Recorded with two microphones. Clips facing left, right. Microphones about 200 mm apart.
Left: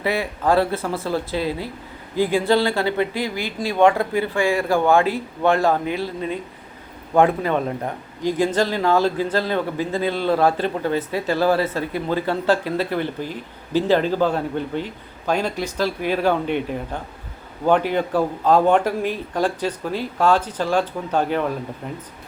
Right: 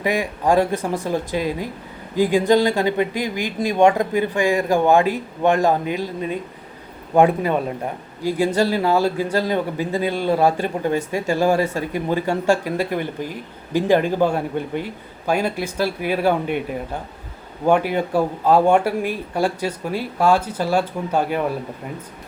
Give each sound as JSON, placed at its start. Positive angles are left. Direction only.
{"t": 0.0, "sound": "a man's voice", "side_deg": -15}